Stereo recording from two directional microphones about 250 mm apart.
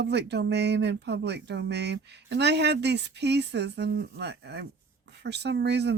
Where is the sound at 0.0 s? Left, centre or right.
Right.